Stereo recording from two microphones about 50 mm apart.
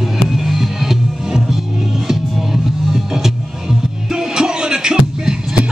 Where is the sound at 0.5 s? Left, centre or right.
Centre.